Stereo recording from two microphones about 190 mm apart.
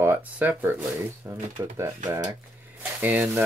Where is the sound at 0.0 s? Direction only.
10° right (ahead or behind).